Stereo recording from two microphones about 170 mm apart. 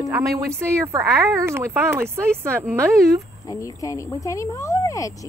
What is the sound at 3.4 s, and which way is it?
Speech, 20° left (ahead or behind).